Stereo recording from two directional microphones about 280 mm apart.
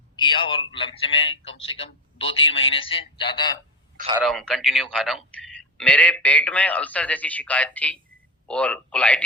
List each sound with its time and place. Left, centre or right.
0.2 s a man's voice: centre
4.2 s speech: centre